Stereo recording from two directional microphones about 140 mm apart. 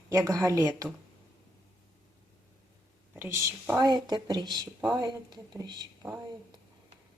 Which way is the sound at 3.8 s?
30° right (ahead or behind).